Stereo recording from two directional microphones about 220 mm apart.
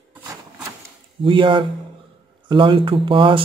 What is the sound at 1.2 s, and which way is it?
Speech, 20° right (ahead or behind).